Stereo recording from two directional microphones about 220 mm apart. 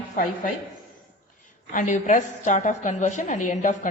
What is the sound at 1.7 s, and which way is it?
A woman's voice, 35° left (ahead or behind).